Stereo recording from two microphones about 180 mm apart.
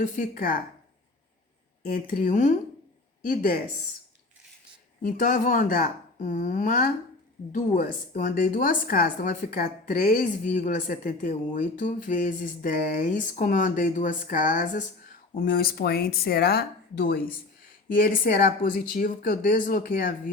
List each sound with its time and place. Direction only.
0.0 s a woman's voice: 45° left (ahead or behind)
1.9 s a woman's voice: 50° left (ahead or behind)
5.0 s a woman's voice: 45° left (ahead or behind)